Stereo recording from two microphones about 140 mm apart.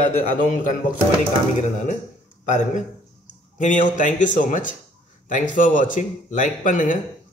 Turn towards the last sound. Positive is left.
turn(degrees=65)  # may be behind; listen again after turning